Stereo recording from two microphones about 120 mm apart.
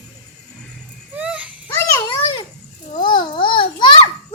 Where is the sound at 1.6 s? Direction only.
20° left (ahead or behind).